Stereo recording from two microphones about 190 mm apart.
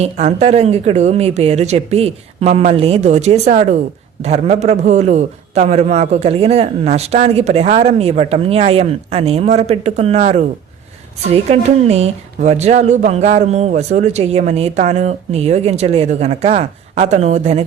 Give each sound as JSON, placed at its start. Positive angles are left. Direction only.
{"t": 0.0, "sound": "a woman's voice", "side_deg": -35}